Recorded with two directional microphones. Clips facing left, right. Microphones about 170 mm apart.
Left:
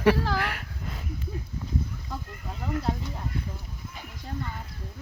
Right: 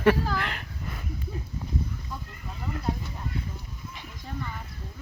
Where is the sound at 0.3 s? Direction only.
90° left.